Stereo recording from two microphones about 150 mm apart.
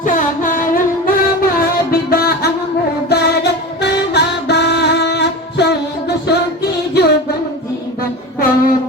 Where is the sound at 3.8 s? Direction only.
90° left.